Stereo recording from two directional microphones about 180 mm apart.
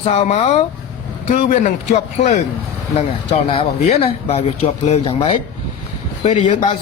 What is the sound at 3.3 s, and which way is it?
A man's voice, 35° left (ahead or behind).